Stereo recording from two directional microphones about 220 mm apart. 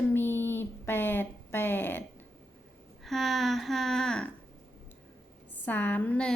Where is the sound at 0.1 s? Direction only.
10° left (ahead or behind).